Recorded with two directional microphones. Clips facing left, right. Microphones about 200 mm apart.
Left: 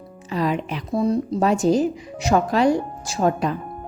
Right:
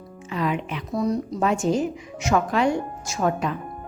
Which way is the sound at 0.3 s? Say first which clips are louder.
Left 3 dB; 35° left (ahead or behind).